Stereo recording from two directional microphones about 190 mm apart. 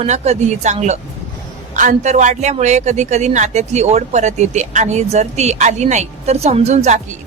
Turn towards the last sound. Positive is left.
turn(degrees=-35)  # may be behind; listen again after turning